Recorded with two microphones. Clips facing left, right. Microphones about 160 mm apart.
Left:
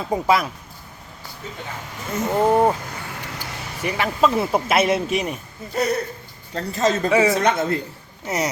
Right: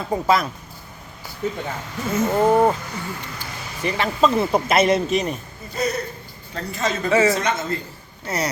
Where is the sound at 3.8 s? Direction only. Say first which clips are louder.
Right 1 dB; 10° left (ahead or behind).